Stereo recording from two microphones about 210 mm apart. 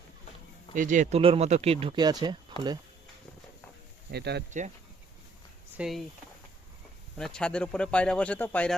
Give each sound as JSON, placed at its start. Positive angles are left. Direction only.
{"t": 0.7, "sound": "speech", "side_deg": -40}
{"t": 4.1, "sound": "speech", "side_deg": -50}
{"t": 5.7, "sound": "speech", "side_deg": 0}
{"t": 7.2, "sound": "speech", "side_deg": 5}